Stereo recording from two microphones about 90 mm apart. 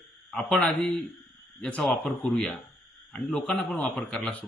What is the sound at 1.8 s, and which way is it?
A man's voice, 5° left (ahead or behind).